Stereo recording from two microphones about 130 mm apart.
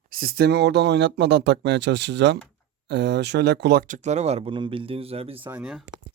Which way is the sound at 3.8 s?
70° right (ahead or behind).